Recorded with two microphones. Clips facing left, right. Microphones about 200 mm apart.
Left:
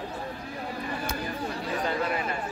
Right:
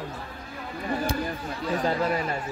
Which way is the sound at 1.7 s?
40° right (ahead or behind).